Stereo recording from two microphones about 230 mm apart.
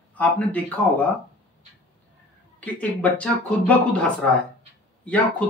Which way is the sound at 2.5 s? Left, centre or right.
Centre.